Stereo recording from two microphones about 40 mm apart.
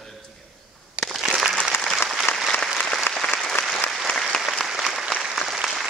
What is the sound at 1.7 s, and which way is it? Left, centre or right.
Applause, left.